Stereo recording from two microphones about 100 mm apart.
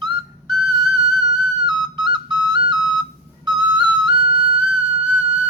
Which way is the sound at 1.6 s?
45° right (ahead or behind).